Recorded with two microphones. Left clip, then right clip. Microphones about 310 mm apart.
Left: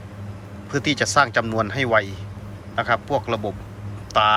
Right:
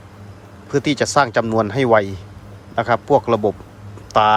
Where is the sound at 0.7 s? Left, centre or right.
Centre.